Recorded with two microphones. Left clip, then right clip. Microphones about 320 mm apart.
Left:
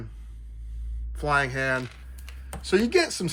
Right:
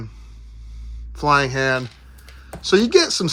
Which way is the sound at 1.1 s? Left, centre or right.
Centre.